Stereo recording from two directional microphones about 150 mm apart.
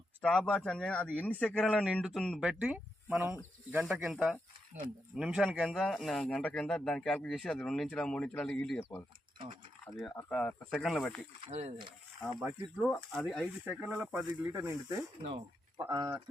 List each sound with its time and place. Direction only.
0.2 s speech: 5° left (ahead or behind)
1.8 s speech: 5° right (ahead or behind)
10.2 s speech: 10° left (ahead or behind)
11.5 s speech: 40° right (ahead or behind)
12.4 s speech: 5° right (ahead or behind)
13.7 s speech: 10° right (ahead or behind)
14.3 s speech: 20° right (ahead or behind)